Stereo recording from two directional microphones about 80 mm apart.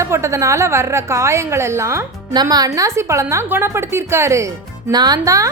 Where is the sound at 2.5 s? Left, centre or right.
Right.